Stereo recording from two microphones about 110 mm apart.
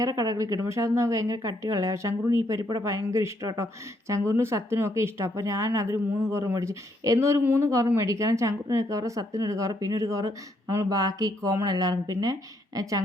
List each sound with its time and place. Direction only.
0.0 s speech: 35° right (ahead or behind)